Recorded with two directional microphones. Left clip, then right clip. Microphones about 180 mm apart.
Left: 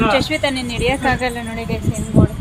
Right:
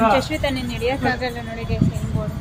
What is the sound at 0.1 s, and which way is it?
Speech, 15° left (ahead or behind).